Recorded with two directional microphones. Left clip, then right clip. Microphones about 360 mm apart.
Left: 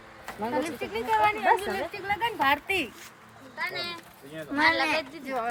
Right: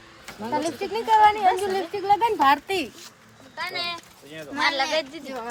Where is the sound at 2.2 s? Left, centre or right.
Centre.